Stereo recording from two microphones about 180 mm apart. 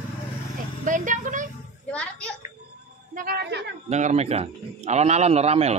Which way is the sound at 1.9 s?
5° left (ahead or behind).